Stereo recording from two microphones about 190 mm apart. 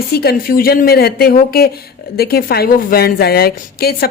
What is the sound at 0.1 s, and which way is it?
A woman's voice, 55° left (ahead or behind).